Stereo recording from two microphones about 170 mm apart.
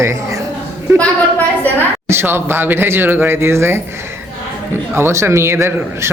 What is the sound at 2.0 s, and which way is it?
Speech, 15° right (ahead or behind).